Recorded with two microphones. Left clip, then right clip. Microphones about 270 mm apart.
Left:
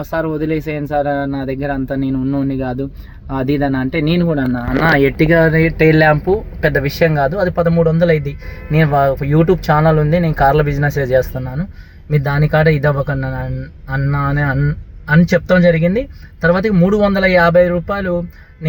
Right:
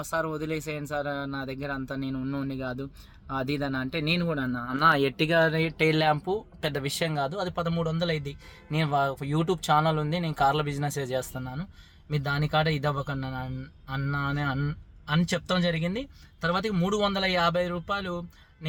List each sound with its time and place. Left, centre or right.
0.0 s speech: right